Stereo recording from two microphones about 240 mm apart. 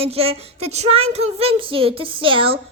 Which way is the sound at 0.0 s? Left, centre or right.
Right.